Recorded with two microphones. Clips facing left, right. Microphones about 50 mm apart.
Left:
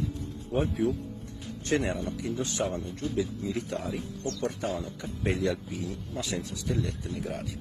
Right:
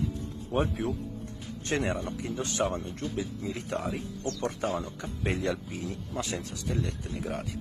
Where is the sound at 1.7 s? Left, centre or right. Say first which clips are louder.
Left 1 dB; right.